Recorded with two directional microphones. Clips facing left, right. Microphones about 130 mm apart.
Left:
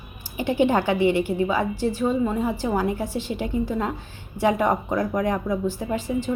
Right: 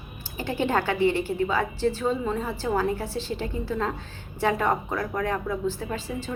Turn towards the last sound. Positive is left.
turn(degrees=15)  # may be behind; listen again after turning